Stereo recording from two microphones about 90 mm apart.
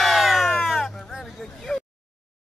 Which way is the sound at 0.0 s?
Centre (ahead or behind).